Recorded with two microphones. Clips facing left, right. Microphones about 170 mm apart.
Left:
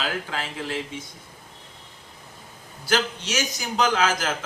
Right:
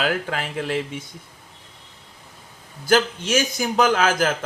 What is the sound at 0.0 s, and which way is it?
Speech, 60° right (ahead or behind).